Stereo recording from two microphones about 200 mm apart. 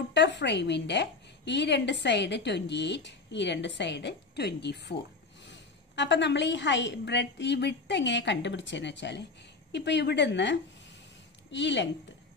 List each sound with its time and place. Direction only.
0.1 s a woman's voice: 60° left (ahead or behind)